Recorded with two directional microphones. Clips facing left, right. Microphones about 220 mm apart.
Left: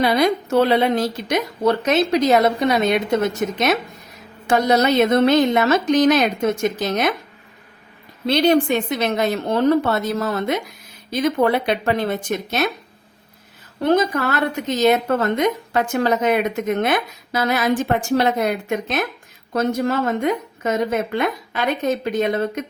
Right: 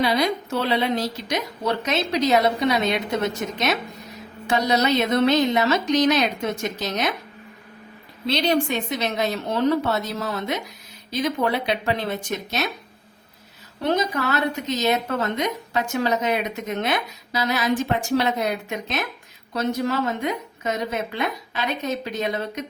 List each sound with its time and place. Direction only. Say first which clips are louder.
0.0 s a woman's voice: left 4 dB; 50° left (ahead or behind)
8.3 s a woman's voice: left 6 dB; 50° left (ahead or behind)
13.8 s a woman's voice: left 5 dB; 50° left (ahead or behind)